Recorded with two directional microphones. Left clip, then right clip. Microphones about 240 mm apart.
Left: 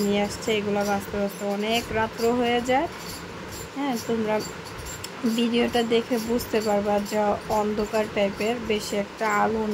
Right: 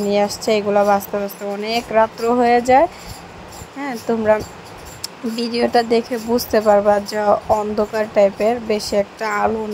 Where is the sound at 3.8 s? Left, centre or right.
Centre.